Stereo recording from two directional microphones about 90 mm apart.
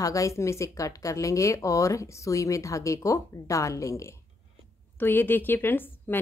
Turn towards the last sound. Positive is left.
turn(degrees=25)  # may be behind; listen again after turning